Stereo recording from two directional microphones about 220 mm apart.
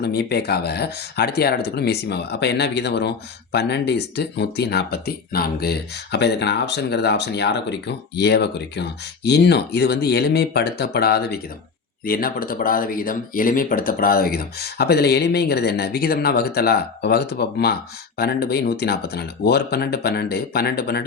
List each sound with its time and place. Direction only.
0.0 s speech: 45° left (ahead or behind)